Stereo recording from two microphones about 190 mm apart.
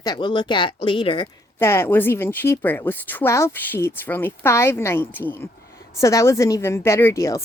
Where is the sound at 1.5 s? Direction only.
15° left (ahead or behind).